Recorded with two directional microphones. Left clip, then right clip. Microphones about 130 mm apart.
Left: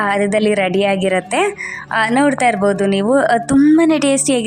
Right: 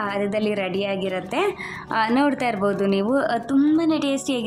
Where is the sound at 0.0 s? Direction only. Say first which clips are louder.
Left 9 dB; 45° left (ahead or behind).